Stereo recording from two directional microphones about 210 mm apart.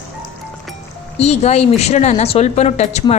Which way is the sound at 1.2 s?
30° left (ahead or behind).